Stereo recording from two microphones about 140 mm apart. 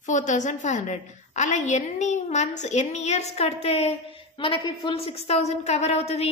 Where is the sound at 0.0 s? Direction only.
60° left (ahead or behind).